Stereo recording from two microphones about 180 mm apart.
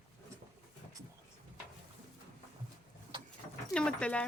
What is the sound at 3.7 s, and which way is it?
Speech, 5° left (ahead or behind).